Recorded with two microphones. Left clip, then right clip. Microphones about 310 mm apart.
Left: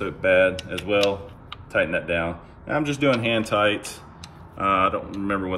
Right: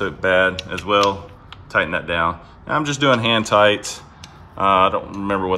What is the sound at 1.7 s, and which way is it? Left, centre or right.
Speech, centre.